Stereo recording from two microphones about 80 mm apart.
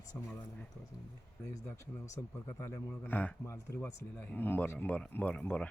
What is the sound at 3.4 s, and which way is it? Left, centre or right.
Speech, left.